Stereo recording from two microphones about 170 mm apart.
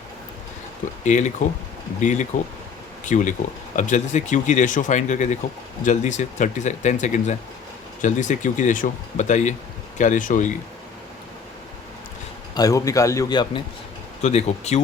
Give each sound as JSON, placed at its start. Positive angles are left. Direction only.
{"t": 1.0, "sound": "speech", "side_deg": 45}
{"t": 12.5, "sound": "a man's voice", "side_deg": 20}
{"t": 14.2, "sound": "speech", "side_deg": 40}